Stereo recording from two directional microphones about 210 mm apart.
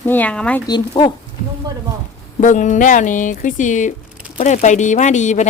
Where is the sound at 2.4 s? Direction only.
35° left (ahead or behind).